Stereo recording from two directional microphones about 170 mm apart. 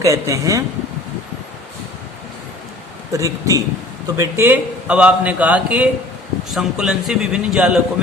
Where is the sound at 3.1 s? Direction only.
20° right (ahead or behind).